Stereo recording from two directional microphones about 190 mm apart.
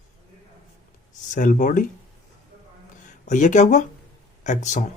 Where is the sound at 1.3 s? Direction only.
45° left (ahead or behind).